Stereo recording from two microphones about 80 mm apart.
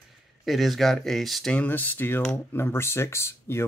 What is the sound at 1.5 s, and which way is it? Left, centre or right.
Speech, left.